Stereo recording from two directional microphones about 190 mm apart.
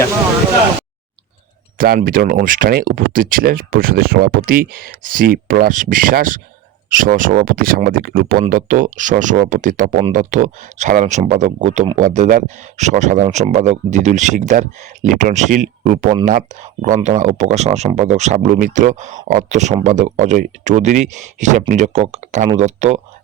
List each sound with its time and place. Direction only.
1.8 s speech: 50° right (ahead or behind)